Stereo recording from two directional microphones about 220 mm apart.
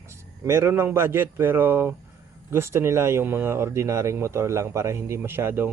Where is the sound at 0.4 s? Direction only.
10° right (ahead or behind).